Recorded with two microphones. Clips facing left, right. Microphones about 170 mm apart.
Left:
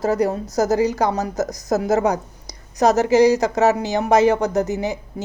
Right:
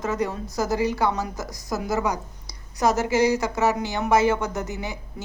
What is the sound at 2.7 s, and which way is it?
Speech, 75° left (ahead or behind).